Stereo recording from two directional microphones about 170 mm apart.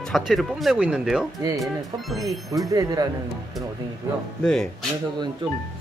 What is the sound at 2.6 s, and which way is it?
Speech, 20° right (ahead or behind).